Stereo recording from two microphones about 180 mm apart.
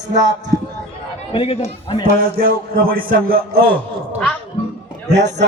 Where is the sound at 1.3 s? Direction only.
30° left (ahead or behind).